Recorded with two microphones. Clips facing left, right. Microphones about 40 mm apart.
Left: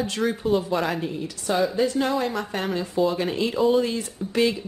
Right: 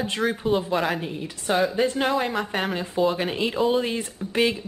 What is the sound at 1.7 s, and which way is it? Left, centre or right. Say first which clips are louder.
A woman's voice: even; right.